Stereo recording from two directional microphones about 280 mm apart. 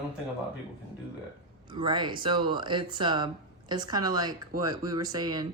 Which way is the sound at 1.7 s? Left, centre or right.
Centre.